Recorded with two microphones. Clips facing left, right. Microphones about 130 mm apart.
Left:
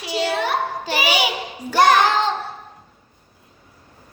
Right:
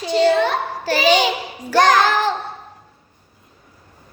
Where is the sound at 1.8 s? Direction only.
90° right.